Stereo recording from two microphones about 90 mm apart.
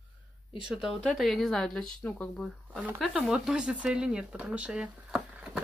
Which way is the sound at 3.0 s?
5° right (ahead or behind).